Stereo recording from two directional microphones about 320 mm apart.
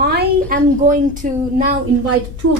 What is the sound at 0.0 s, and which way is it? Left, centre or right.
A woman's voice, right.